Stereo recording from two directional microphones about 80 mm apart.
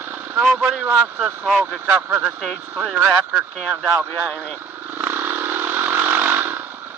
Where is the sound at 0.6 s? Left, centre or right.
Centre.